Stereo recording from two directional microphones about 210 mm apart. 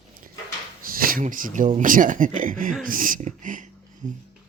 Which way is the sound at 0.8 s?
40° right (ahead or behind).